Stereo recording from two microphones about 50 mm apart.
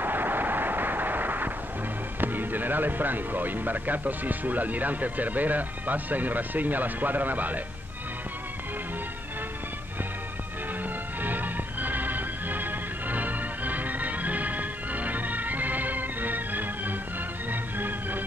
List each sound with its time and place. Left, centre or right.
0.0 s vehicle: right
2.1 s speech: right
11.2 s music: right